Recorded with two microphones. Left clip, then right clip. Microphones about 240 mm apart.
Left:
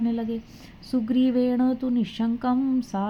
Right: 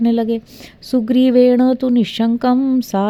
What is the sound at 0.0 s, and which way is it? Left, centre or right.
Speech, right.